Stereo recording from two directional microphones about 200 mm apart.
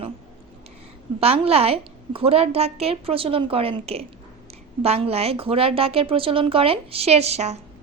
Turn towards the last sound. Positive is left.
turn(degrees=-30)  # may be behind; listen again after turning